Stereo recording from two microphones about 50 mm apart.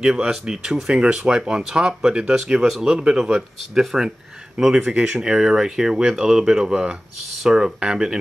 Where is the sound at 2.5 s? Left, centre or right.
Centre.